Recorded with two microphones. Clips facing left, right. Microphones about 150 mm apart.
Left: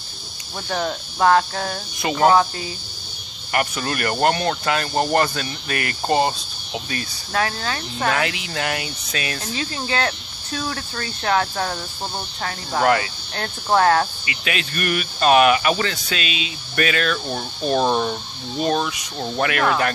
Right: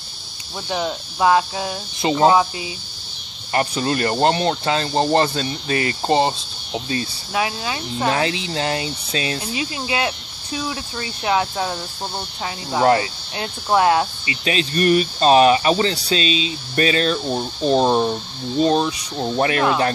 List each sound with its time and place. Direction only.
0.7 s speech: 10° right (ahead or behind)
2.0 s speech: 25° right (ahead or behind)
3.5 s speech: 25° right (ahead or behind)
7.3 s speech: 10° right (ahead or behind)
8.1 s speech: 30° right (ahead or behind)
9.4 s speech: 10° right (ahead or behind)
12.8 s speech: 30° right (ahead or behind)
13.7 s speech: 15° right (ahead or behind)
14.2 s speech: 30° right (ahead or behind)